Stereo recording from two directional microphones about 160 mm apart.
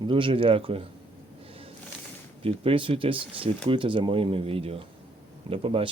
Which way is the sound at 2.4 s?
35° right (ahead or behind).